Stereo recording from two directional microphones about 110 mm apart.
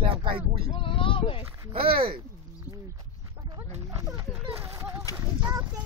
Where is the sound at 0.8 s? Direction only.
55° left (ahead or behind).